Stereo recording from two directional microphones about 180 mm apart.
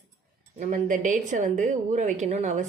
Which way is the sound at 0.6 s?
45° right (ahead or behind).